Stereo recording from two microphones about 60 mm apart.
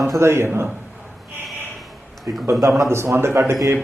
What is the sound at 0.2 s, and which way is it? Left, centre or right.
Speech, right.